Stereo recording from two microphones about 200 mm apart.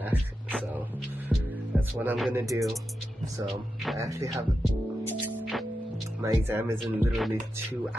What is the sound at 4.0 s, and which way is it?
Speech, 15° right (ahead or behind).